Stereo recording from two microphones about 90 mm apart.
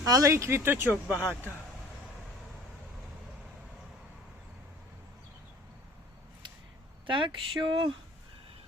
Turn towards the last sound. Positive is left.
turn(degrees=-65)  # may be behind; listen again after turning